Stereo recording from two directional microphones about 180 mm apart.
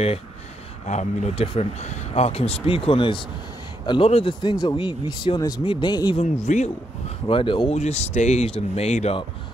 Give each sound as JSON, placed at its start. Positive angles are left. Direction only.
{"t": 0.8, "sound": "speech", "side_deg": 40}
{"t": 6.4, "sound": "speech", "side_deg": 40}
{"t": 7.2, "sound": "speech", "side_deg": 30}